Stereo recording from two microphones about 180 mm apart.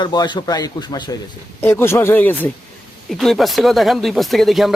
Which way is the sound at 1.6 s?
15° left (ahead or behind).